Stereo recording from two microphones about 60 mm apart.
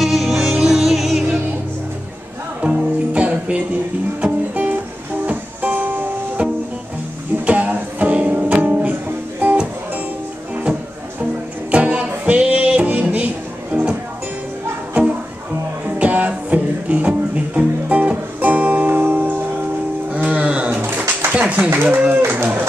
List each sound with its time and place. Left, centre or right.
0.0 s music: centre
2.6 s music: right
7.4 s music: right
10.5 s music: centre
16.0 s music: right
21.3 s a sound: right